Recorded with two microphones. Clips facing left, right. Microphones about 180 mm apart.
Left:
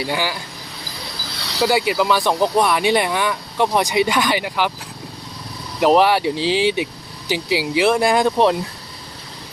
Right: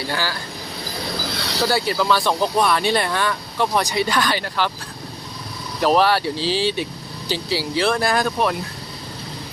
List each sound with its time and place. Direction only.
0.1 s speech: 15° left (ahead or behind)
1.6 s speech: 15° left (ahead or behind)
5.8 s speech: 15° left (ahead or behind)